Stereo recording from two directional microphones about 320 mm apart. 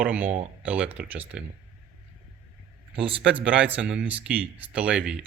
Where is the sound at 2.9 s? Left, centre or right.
Centre.